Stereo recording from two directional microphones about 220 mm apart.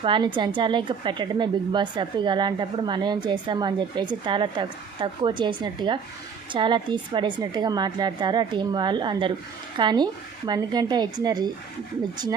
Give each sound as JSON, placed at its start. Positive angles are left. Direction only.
{"t": 0.0, "sound": "a woman's voice", "side_deg": -20}